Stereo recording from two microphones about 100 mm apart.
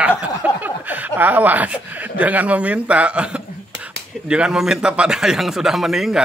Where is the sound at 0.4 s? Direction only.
15° right (ahead or behind).